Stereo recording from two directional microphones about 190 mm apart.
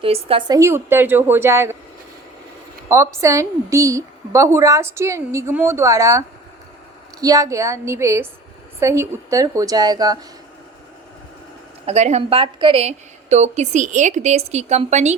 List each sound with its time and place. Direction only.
0.0 s a woman's voice: 30° right (ahead or behind); by 1.7 s 15° right (ahead or behind)
2.9 s a woman's voice: 15° right (ahead or behind)
11.9 s a woman's voice: 35° right (ahead or behind)